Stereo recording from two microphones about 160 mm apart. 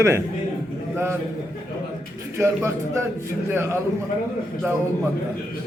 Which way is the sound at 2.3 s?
15° right (ahead or behind).